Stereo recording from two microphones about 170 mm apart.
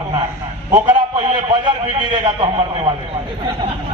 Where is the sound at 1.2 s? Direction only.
25° right (ahead or behind).